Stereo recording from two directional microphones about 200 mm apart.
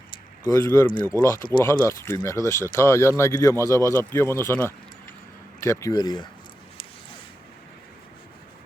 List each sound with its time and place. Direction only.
0.4 s speech: 15° left (ahead or behind)